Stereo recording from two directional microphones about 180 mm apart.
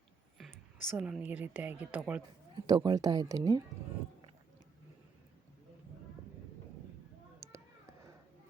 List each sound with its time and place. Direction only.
0.9 s a woman's voice: 5° right (ahead or behind)
2.6 s speech: 25° right (ahead or behind)
7.3 s a sound: 15° right (ahead or behind)